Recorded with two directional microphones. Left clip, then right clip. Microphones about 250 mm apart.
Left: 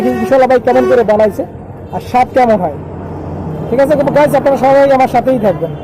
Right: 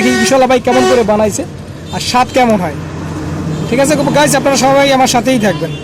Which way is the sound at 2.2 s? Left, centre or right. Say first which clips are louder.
Left 1 dB; centre.